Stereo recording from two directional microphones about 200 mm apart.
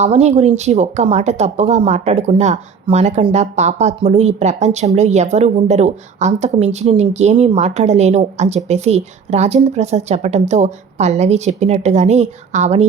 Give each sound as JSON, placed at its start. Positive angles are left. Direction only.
{"t": 0.0, "sound": "speech", "side_deg": -35}